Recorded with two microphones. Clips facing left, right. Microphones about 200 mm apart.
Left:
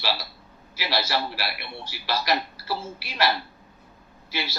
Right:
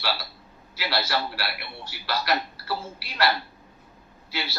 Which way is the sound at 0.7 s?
15° left (ahead or behind).